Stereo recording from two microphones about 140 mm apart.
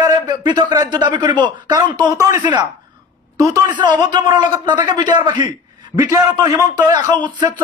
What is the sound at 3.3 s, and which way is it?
A man's voice, 25° right (ahead or behind).